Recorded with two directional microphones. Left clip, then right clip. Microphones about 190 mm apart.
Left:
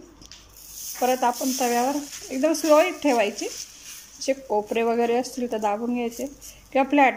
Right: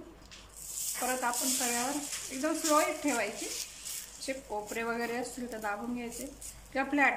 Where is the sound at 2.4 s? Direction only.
45° left (ahead or behind).